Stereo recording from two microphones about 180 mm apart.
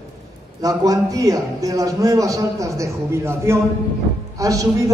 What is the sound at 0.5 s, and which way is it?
A man's voice, 20° right (ahead or behind).